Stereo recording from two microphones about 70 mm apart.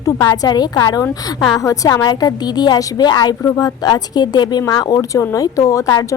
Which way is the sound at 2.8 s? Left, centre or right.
Left.